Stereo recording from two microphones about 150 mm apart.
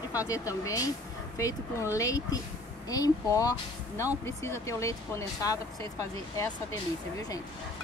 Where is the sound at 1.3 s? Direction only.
20° left (ahead or behind).